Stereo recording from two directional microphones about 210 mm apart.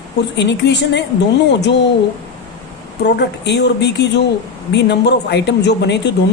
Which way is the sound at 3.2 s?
55° left (ahead or behind).